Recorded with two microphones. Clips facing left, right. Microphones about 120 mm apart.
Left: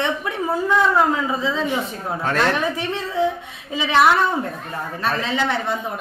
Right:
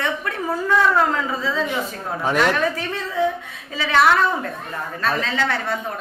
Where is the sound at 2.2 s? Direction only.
10° right (ahead or behind).